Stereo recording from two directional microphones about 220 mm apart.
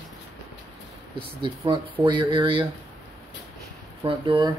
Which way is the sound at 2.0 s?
20° right (ahead or behind).